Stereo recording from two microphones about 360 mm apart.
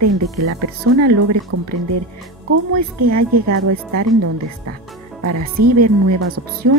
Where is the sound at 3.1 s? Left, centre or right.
Right.